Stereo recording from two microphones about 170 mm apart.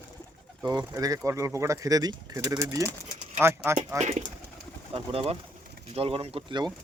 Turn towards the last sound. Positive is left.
turn(degrees=-30)  # may be behind; listen again after turning